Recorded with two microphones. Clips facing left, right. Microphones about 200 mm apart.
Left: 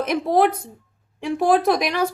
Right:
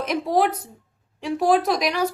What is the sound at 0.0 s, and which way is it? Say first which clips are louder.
A woman's voice: left 3 dB; 55° left (ahead or behind).